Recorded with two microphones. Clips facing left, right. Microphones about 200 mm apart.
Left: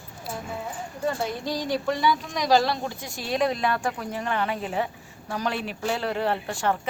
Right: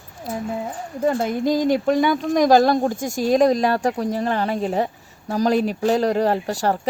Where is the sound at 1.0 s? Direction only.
50° right (ahead or behind).